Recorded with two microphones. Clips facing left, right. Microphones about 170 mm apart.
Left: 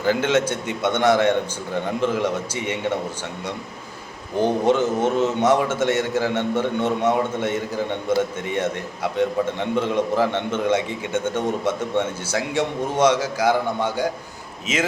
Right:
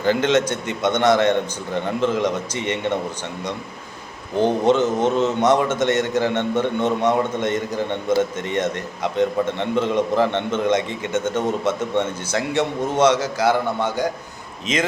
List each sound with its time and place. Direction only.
0.0 s a man's voice: 10° left (ahead or behind)
4.4 s a man's voice: 10° left (ahead or behind)